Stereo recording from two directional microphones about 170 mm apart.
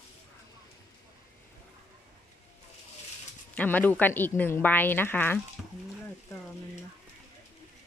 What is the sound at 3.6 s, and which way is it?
A woman's voice, 10° left (ahead or behind).